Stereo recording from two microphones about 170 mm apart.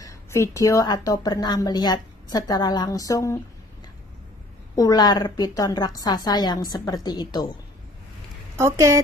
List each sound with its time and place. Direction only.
0.0 s a woman's voice: 15° left (ahead or behind)
4.7 s a woman's voice: 20° left (ahead or behind)
8.5 s speech: 15° right (ahead or behind)